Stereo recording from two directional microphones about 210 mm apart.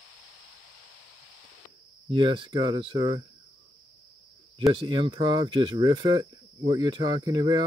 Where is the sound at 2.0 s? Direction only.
25° right (ahead or behind).